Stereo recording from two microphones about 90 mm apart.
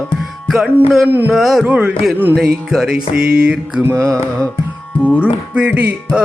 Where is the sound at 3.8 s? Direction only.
30° right (ahead or behind).